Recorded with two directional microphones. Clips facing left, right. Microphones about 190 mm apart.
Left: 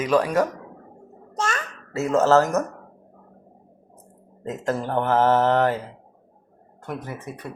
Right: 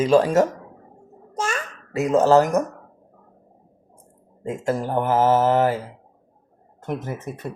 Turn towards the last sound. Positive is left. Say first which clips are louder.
# right 4 dB
turn(degrees=-25)  # may be behind; listen again after turning